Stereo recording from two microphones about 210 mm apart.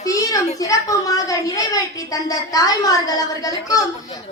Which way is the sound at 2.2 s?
15° left (ahead or behind).